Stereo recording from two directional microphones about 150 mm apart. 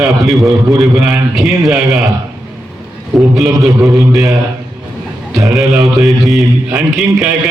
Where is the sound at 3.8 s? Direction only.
20° right (ahead or behind).